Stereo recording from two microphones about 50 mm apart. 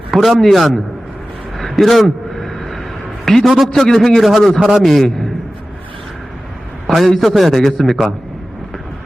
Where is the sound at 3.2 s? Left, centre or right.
Centre.